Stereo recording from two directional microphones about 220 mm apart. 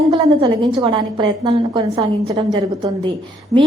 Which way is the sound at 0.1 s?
20° right (ahead or behind).